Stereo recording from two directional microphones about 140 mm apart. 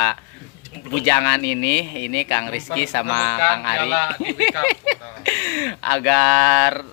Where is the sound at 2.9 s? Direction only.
50° left (ahead or behind).